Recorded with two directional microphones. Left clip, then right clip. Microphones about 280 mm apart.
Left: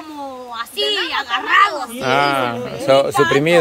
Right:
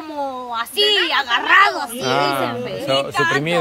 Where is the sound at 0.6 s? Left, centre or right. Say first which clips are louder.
Right 3 dB; centre.